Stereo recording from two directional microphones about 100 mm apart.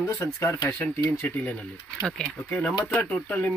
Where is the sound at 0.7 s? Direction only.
15° left (ahead or behind).